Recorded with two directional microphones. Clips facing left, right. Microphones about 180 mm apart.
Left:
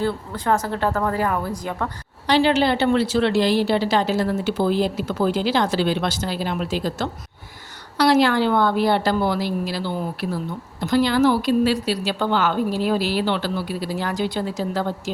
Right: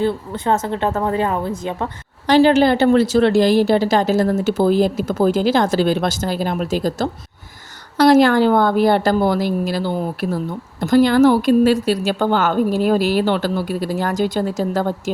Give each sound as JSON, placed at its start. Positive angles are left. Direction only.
{"t": 0.0, "sound": "a woman's voice", "side_deg": -20}
{"t": 2.2, "sound": "a woman's voice", "side_deg": -45}